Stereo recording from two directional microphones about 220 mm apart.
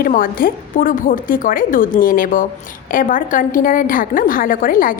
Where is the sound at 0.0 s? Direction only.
40° left (ahead or behind).